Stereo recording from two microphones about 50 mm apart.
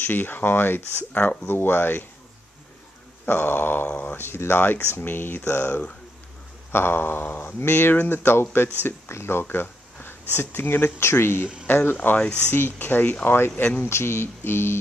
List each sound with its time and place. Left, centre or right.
0.0 s speech: left
3.3 s speech: left
4.2 s speech: left
11.0 s speech: left
13.8 s speech: left